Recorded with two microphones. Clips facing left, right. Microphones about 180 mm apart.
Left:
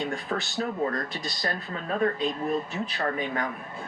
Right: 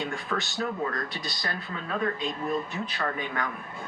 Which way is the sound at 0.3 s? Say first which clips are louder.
Left 1 dB; 30° left (ahead or behind).